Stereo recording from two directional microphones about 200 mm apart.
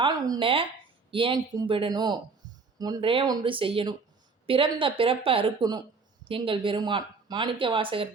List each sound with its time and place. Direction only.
0.0 s speech: 20° right (ahead or behind)